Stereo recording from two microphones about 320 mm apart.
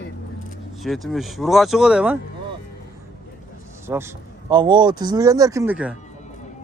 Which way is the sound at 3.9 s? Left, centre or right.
Centre.